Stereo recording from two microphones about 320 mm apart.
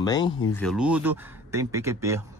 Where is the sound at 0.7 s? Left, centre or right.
Centre.